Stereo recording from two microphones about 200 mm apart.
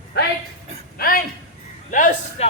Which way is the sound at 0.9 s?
45° left (ahead or behind).